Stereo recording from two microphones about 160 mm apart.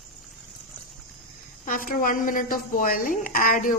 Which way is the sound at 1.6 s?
60° left (ahead or behind).